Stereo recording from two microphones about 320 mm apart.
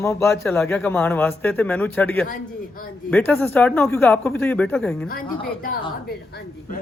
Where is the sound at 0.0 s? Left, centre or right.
Centre.